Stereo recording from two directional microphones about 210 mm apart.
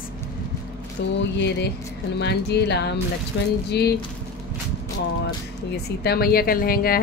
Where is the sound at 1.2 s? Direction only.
55° left (ahead or behind).